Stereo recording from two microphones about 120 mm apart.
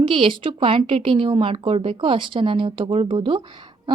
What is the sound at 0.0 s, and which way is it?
A woman's voice, 45° right (ahead or behind).